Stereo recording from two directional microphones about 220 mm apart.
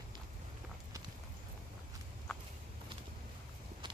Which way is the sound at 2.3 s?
5° left (ahead or behind).